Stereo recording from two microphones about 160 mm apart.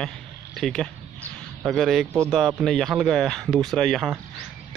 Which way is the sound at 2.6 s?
Centre (ahead or behind).